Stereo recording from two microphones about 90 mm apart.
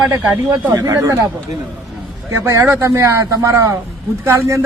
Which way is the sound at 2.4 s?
30° right (ahead or behind).